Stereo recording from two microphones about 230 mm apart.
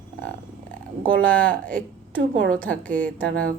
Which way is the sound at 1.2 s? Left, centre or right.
Centre.